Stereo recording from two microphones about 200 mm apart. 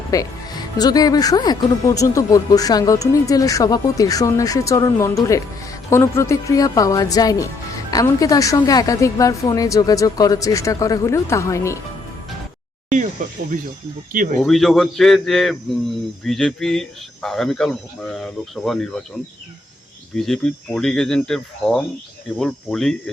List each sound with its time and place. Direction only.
0.1 s speech: 20° left (ahead or behind)
12.9 s speech: 40° right (ahead or behind)
14.3 s speech: centre (ahead or behind)
20.1 s speech: centre (ahead or behind)